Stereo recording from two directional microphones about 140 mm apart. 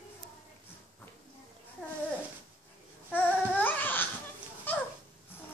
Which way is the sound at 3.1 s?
10° left (ahead or behind).